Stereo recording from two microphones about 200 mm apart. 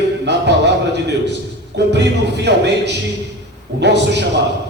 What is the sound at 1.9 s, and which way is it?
A man's voice, 60° right (ahead or behind).